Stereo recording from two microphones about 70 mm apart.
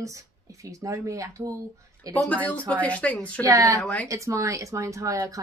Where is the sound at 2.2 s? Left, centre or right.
Left.